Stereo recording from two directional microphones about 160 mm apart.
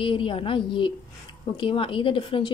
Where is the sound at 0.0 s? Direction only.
35° left (ahead or behind).